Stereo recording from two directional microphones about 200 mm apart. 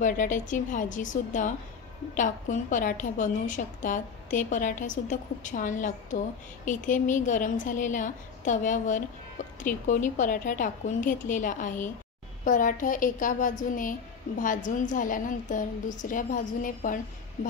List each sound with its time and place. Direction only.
0.0 s a woman's voice: 40° left (ahead or behind)